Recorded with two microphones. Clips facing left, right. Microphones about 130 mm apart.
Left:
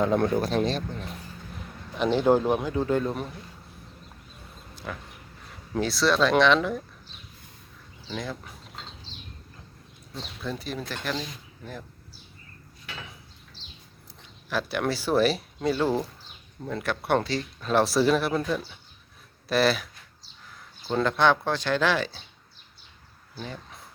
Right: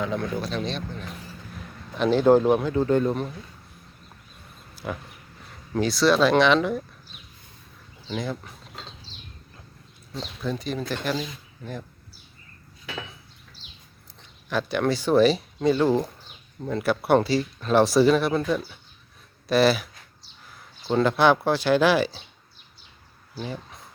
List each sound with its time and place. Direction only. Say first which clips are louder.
0.0 s speech: left 5 dB; 50° left (ahead or behind)
2.1 s speech: right 4 dB; 5° left (ahead or behind)
4.8 s speech: right 5 dB; 15° right (ahead or behind)
5.7 s speech: right 3 dB; centre (ahead or behind)
8.1 s speech: right 4 dB; centre (ahead or behind)
10.4 s speech: right 4 dB; centre (ahead or behind)
13.6 s a sound: left 1 dB; 10° right (ahead or behind)
14.2 s speech: right 2 dB; 5° left (ahead or behind)